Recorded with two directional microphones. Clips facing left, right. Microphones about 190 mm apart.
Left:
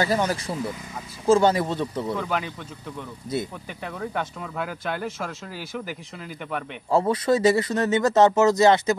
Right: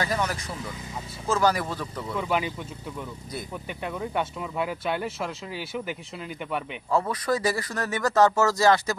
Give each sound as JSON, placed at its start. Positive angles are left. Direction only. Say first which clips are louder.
{"t": 0.0, "sound": "speech", "louder": "left 5 dB", "side_deg": 30}
{"t": 2.1, "sound": "speech", "louder": "right 1 dB", "side_deg": -5}
{"t": 4.0, "sound": "speech", "louder": "left 1 dB", "side_deg": -5}
{"t": 6.9, "sound": "speech", "louder": "left 5 dB", "side_deg": 30}